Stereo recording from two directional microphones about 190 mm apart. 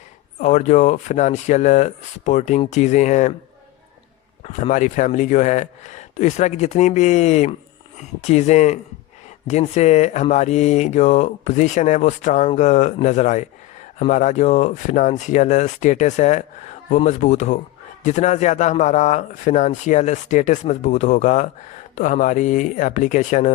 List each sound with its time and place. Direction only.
0.3 s speech: 40° left (ahead or behind)
4.4 s speech: 35° left (ahead or behind)